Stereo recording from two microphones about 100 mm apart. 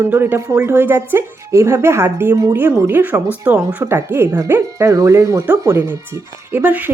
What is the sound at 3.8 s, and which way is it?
Speech, 25° right (ahead or behind).